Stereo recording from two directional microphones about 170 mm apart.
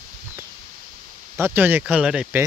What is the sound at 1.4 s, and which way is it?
Speech, 10° right (ahead or behind).